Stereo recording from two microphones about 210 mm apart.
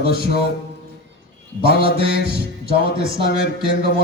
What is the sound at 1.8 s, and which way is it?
Mantra, 25° right (ahead or behind).